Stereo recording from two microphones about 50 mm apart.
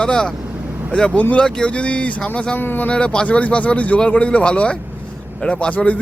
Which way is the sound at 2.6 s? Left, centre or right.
Left.